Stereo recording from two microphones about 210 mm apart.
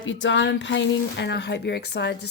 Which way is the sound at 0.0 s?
60° left (ahead or behind).